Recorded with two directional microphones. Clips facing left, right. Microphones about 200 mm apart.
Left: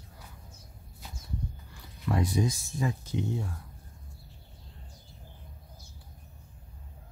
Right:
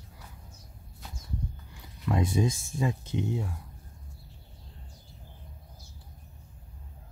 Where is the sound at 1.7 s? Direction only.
25° right (ahead or behind).